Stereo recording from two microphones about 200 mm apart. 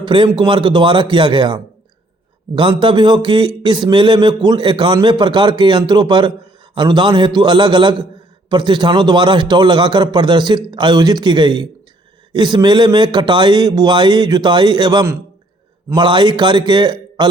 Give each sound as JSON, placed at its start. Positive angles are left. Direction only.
{"t": 0.0, "sound": "a man's voice", "side_deg": -25}